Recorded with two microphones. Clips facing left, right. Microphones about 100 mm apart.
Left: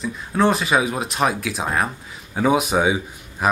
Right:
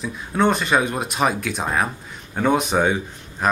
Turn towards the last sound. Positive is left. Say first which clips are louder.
# left 1 dB
turn(degrees=5)  # may be behind; listen again after turning